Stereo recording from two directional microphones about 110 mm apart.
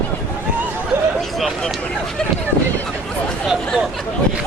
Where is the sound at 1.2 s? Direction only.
Centre (ahead or behind).